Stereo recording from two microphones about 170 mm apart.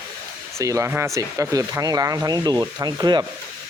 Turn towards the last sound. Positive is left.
turn(degrees=-25)  # may be behind; listen again after turning